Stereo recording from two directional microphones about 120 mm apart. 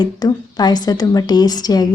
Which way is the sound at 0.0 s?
35° left (ahead or behind).